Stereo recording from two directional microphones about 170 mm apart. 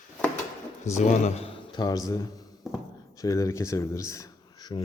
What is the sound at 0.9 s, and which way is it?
A man's voice, 45° left (ahead or behind).